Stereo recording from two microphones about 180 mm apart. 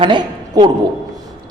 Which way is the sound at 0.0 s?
25° right (ahead or behind).